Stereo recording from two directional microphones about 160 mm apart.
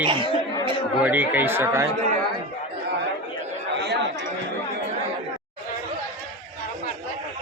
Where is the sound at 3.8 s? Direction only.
90° right.